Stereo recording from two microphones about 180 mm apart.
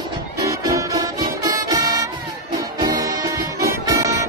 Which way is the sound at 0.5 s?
20° right (ahead or behind).